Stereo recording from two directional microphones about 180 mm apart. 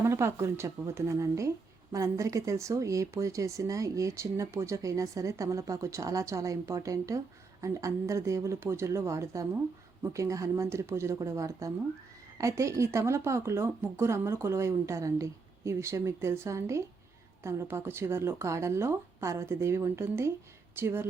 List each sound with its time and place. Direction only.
0.0 s speech: 15° right (ahead or behind)